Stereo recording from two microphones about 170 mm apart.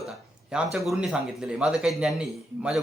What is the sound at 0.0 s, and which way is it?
Speech, centre (ahead or behind).